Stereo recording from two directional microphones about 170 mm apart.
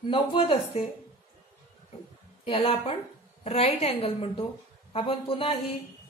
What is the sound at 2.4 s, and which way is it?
A woman's voice, 35° left (ahead or behind).